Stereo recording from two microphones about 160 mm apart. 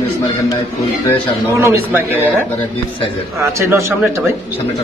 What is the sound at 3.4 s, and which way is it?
Speech, 20° right (ahead or behind).